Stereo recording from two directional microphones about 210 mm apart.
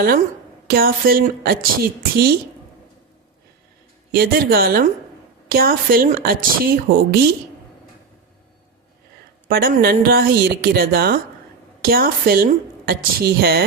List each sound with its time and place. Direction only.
0.7 s speech: 45° right (ahead or behind)
4.1 s speech: 45° right (ahead or behind)
9.5 s speech: 45° right (ahead or behind)